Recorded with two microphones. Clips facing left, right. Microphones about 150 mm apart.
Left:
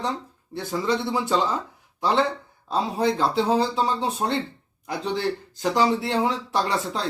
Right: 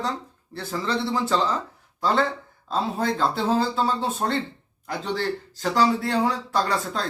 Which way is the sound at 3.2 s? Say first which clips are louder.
Right 1 dB; 15° left (ahead or behind).